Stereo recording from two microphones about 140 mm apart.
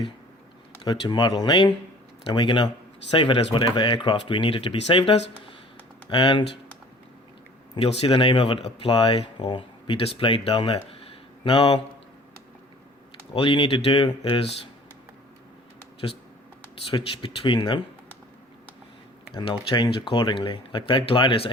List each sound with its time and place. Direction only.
0.9 s speech: 30° left (ahead or behind)
7.8 s speech: 45° left (ahead or behind)
13.3 s speech: 40° left (ahead or behind)
16.9 s speech: 40° left (ahead or behind)
19.5 s speech: 35° left (ahead or behind)